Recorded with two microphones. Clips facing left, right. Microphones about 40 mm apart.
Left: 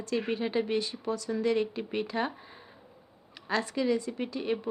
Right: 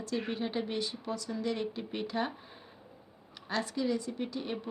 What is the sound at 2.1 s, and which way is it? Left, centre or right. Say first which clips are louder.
Speech: left 2 dB; left.